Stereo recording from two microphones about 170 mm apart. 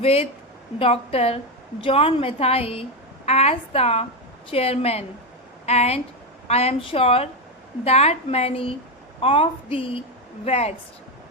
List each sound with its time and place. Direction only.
0.0 s a woman's voice: 35° left (ahead or behind)